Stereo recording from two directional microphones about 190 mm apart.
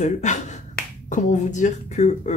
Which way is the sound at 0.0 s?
40° left (ahead or behind).